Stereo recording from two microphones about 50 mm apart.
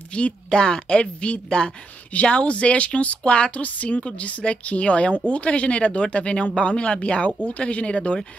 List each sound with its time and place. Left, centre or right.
0.1 s speech: centre